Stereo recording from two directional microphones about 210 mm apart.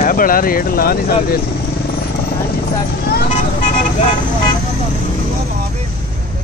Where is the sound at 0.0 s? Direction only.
40° left (ahead or behind).